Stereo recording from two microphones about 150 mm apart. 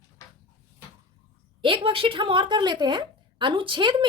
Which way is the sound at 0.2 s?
20° left (ahead or behind).